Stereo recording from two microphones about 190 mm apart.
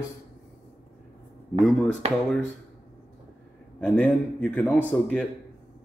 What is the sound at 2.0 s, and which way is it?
Speech, 30° right (ahead or behind).